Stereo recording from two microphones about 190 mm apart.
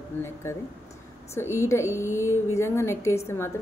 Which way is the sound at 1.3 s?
15° left (ahead or behind).